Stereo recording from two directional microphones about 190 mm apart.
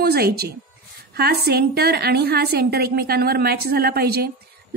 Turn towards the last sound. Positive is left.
turn(degrees=-55)  # may be behind; listen again after turning